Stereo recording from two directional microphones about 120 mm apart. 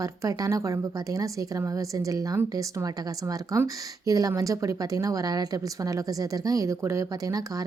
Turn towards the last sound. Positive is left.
turn(degrees=-30)  # may be behind; listen again after turning